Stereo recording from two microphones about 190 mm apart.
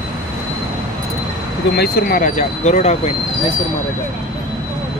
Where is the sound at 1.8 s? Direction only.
55° left (ahead or behind); by 3.0 s 35° left (ahead or behind).